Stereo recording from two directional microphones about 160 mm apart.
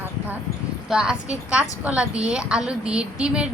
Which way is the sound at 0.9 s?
5° right (ahead or behind).